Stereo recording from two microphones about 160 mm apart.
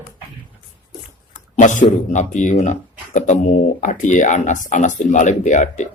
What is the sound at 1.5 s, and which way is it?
Speech, 50° left (ahead or behind).